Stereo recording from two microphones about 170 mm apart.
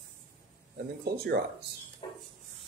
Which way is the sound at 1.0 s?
65° right (ahead or behind).